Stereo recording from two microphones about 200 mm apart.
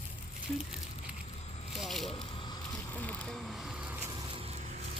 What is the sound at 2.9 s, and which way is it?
Music, 5° left (ahead or behind).